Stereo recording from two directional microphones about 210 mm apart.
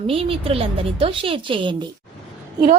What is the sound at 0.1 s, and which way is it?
A woman's voice, 25° right (ahead or behind).